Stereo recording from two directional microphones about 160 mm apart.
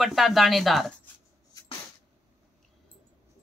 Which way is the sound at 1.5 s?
20° left (ahead or behind).